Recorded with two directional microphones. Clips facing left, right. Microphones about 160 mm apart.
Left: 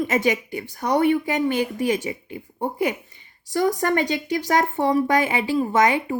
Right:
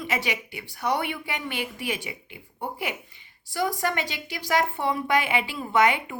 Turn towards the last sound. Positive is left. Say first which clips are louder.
# left 3 dB
turn(degrees=40)  # may be behind; listen again after turning